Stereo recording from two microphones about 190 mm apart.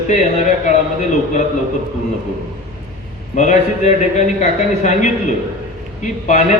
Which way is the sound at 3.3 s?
40° left (ahead or behind).